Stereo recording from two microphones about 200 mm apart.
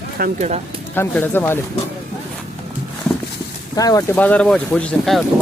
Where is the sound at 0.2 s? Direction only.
35° right (ahead or behind).